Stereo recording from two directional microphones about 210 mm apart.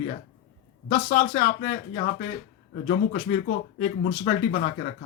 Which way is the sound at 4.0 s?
40° left (ahead or behind).